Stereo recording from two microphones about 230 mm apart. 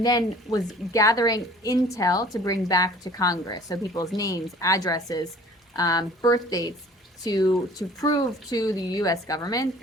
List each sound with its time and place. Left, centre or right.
0.0 s a woman's voice: centre